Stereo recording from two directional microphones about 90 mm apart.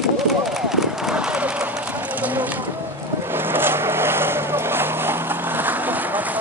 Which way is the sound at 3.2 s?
25° right (ahead or behind).